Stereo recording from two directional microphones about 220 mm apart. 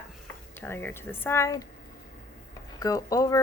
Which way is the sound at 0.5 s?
10° left (ahead or behind).